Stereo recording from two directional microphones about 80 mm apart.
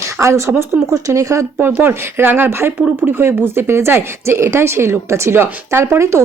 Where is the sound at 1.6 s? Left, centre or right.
Right.